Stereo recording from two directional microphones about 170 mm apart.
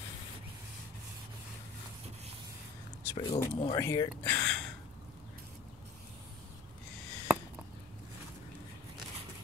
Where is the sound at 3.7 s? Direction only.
20° left (ahead or behind).